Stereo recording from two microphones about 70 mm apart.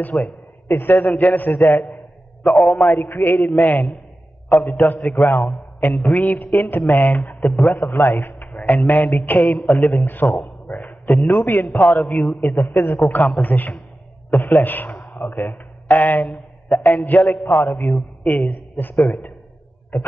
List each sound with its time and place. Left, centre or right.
0.0 s a man's voice: left